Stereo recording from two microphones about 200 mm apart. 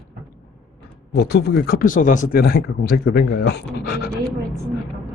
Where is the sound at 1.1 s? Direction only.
55° left (ahead or behind).